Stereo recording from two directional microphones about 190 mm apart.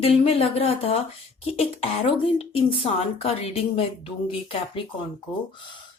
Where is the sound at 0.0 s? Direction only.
30° left (ahead or behind).